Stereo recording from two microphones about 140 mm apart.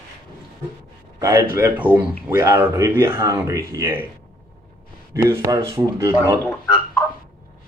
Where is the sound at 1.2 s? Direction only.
25° right (ahead or behind).